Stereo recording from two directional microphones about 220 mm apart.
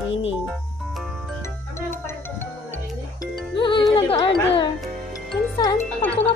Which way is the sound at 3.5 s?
20° left (ahead or behind).